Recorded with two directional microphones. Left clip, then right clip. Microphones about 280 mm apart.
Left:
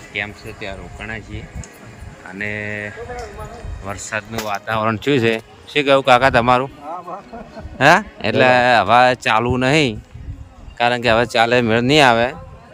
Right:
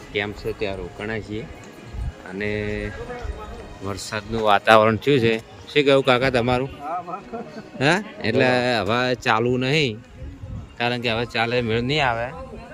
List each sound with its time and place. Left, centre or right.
0.1 s speech: centre
4.4 s speech: right
4.9 s speech: centre
7.8 s speech: centre